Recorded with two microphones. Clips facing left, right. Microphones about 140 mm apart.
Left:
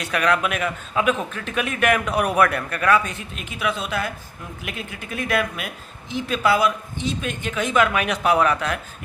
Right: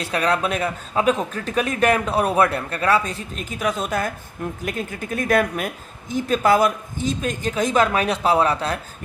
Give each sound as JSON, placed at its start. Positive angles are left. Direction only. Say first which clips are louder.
{"t": 0.0, "sound": "speech", "louder": "even", "side_deg": -30}